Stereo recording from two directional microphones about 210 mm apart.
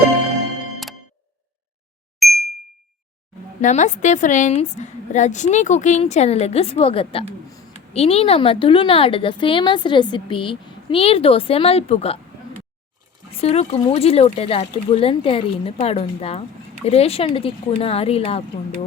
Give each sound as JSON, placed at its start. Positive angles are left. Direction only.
{"t": 2.1, "sound": "ding", "side_deg": 0}
{"t": 3.6, "sound": "a woman's voice", "side_deg": 35}
{"t": 13.3, "sound": "a woman's voice", "side_deg": 30}